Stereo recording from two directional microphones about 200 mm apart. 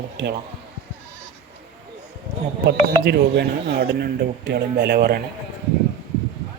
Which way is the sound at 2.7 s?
55° right (ahead or behind).